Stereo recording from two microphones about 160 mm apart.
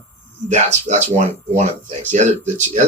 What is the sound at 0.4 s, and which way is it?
Speech, 45° right (ahead or behind).